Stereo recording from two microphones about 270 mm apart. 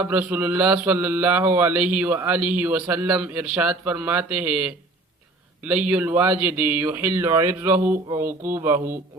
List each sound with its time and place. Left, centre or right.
0.0 s speech: centre